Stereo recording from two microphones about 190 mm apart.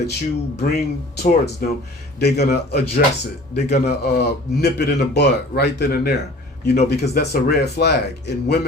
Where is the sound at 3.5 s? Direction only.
35° left (ahead or behind).